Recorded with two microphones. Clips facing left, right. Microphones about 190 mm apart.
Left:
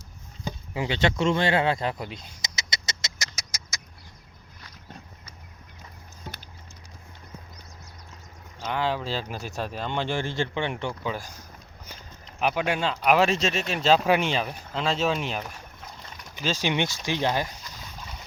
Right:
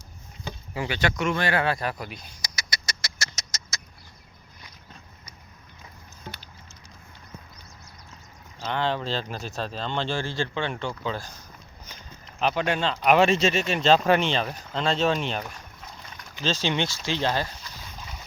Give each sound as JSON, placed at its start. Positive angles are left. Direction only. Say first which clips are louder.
{"t": 0.7, "sound": "speech", "louder": "left 2 dB", "side_deg": 20}
{"t": 3.3, "sound": "rodents", "louder": "right 1 dB", "side_deg": 10}
{"t": 8.6, "sound": "speech", "louder": "even", "side_deg": 5}